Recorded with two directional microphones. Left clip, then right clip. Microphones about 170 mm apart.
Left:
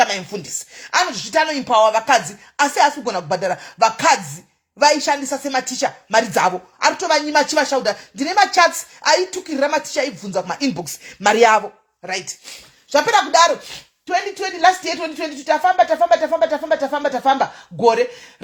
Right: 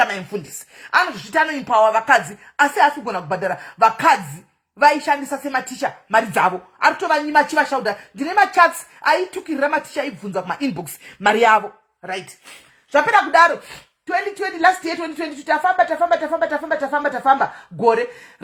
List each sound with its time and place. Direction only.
0.0 s speech: 45° left (ahead or behind)
12.9 s speech: 40° left (ahead or behind)
15.4 s speech: 35° left (ahead or behind)